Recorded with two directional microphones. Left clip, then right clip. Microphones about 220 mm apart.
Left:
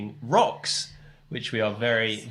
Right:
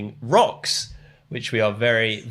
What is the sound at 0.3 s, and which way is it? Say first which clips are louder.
Speech: right 4 dB; 35° right (ahead or behind).